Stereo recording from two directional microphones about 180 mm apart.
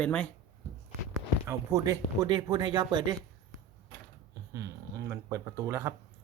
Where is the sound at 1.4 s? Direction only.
20° right (ahead or behind).